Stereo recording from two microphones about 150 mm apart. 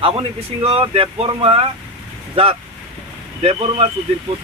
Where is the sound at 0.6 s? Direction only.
40° right (ahead or behind).